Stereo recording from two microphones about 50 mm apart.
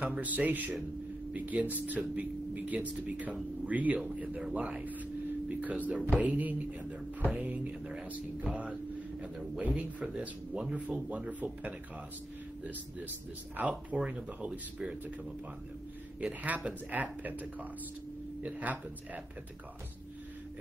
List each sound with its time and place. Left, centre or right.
0.0 s speech: right
10.5 s speech: centre
13.6 s speech: right
16.2 s speech: right